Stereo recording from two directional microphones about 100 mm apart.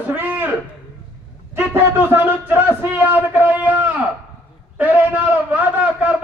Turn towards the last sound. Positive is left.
turn(degrees=-15)  # may be behind; listen again after turning